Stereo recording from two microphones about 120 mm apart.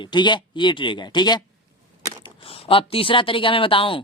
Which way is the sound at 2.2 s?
50° left (ahead or behind).